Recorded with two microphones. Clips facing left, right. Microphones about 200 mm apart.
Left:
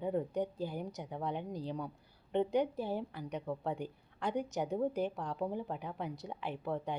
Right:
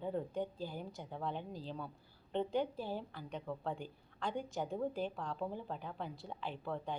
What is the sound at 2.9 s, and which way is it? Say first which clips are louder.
A woman's voice: left 5 dB; 15° left (ahead or behind).